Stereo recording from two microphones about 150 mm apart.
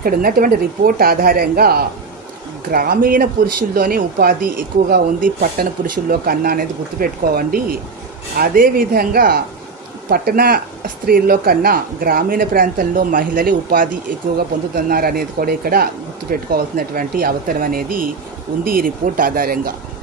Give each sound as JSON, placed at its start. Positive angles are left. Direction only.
{"t": 0.0, "sound": "a woman's voice", "side_deg": -75}
{"t": 2.7, "sound": "speech", "side_deg": -75}
{"t": 14.9, "sound": "speech", "side_deg": -80}